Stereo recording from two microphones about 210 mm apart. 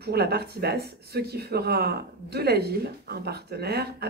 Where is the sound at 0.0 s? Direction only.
50° right (ahead or behind).